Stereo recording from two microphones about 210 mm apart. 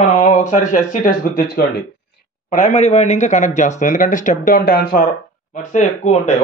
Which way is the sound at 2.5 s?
35° left (ahead or behind).